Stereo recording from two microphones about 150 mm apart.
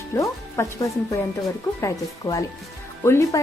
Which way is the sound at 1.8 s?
20° left (ahead or behind).